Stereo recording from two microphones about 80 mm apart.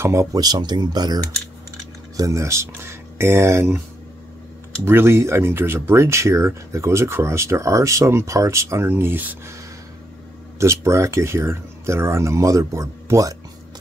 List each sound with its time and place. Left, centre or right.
0.0 s speech: right
2.1 s speech: right
4.8 s speech: right
10.6 s speech: right